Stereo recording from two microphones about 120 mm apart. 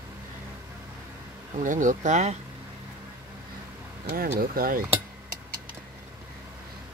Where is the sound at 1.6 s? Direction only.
90° right.